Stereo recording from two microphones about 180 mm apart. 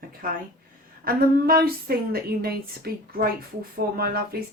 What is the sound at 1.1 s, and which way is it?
A woman's voice, 55° right (ahead or behind).